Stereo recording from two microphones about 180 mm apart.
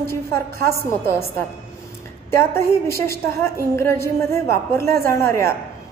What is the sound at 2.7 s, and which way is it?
Speech, 15° left (ahead or behind).